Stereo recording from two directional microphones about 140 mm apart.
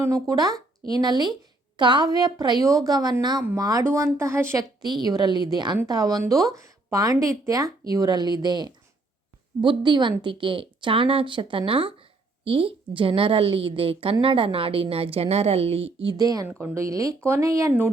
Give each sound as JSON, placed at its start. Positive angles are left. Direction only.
{"t": 0.0, "sound": "speech", "side_deg": -25}
{"t": 4.8, "sound": "a woman's voice", "side_deg": -30}
{"t": 16.1, "sound": "speech", "side_deg": -25}
{"t": 16.5, "sound": "speech", "side_deg": -15}